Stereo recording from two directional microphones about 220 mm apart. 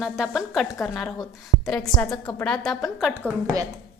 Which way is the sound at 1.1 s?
15° left (ahead or behind).